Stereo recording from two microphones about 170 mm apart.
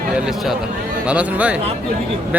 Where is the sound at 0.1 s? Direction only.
5° right (ahead or behind).